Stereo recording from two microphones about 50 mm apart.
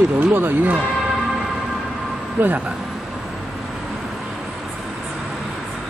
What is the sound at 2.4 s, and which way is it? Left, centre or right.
Speech, right.